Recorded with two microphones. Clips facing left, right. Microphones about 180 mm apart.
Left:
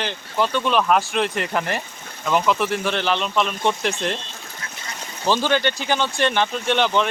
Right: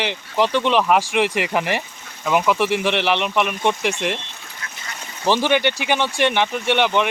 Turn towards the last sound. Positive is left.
turn(degrees=-15)  # may be behind; listen again after turning